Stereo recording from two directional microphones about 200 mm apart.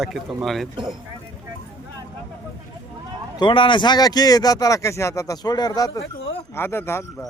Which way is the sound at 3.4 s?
25° left (ahead or behind).